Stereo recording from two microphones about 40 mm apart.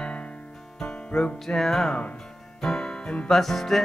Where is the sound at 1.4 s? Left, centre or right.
Centre; by 3.3 s left.